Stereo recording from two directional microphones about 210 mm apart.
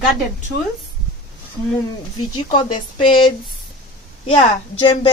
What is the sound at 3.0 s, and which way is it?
Speech, 25° left (ahead or behind).